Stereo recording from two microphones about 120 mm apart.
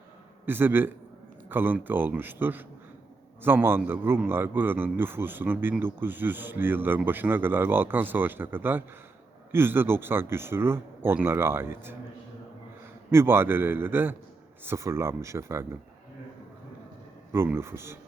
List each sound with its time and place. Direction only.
0.4 s speech: 15° right (ahead or behind)
13.1 s speech: 20° right (ahead or behind)
17.3 s speech: 20° right (ahead or behind)